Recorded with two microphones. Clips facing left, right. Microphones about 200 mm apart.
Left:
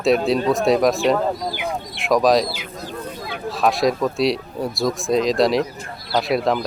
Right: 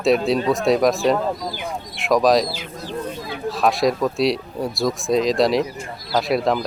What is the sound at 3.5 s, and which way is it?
Speech, centre (ahead or behind).